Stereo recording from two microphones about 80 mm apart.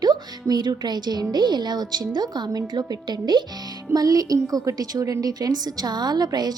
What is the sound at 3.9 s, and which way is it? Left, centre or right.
A woman's voice, right.